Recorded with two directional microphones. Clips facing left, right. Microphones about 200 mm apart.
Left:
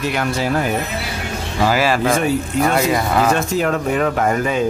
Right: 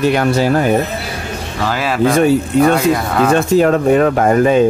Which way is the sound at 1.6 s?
5° left (ahead or behind).